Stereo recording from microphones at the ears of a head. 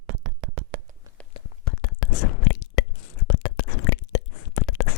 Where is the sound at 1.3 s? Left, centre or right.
Left.